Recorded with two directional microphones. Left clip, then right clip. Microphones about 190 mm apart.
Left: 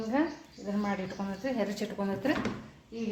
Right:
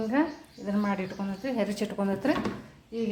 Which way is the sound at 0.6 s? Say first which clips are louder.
Right 3 dB; 25° right (ahead or behind).